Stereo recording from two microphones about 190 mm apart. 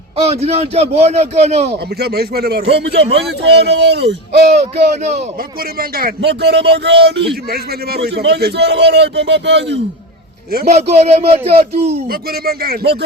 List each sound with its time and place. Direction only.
0.2 s a man's voice: 35° right (ahead or behind)
2.0 s a man's voice: 55° right (ahead or behind)
6.0 s a man's voice: 55° right (ahead or behind)
10.7 s a man's voice: 35° right (ahead or behind)
12.5 s speech: 55° right (ahead or behind)